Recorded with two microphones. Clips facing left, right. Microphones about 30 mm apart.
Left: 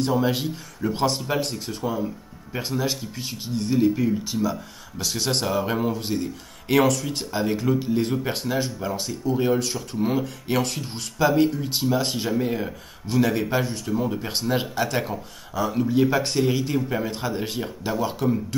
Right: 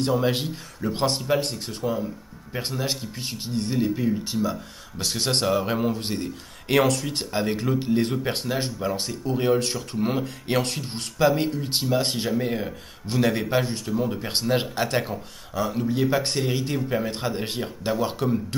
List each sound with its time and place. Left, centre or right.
0.2 s speech: centre
5.9 s speech: right
10.7 s speech: centre
13.9 s speech: centre
14.3 s speech: centre
17.6 s speech: centre